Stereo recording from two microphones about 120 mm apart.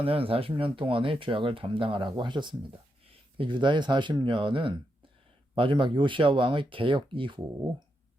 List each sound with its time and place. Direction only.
0.0 s speech: 50° right (ahead or behind)